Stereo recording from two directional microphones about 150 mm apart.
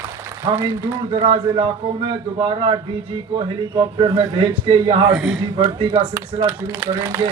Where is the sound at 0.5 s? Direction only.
15° right (ahead or behind).